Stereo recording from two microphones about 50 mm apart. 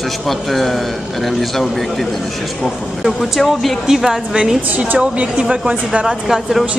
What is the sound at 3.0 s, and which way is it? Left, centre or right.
A woman's voice, centre.